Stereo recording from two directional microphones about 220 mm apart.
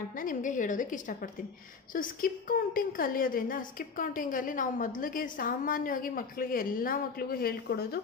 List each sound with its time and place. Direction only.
0.2 s a woman's voice: 35° left (ahead or behind)